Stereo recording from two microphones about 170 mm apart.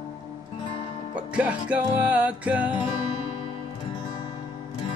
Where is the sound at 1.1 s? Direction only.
5° right (ahead or behind).